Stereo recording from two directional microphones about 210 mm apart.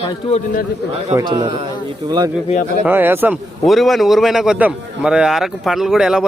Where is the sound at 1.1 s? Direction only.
20° right (ahead or behind).